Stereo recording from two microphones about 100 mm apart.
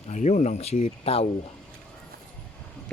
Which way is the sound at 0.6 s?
90° left.